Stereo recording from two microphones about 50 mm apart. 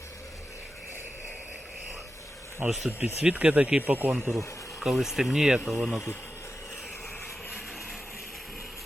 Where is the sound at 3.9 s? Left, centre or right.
Right.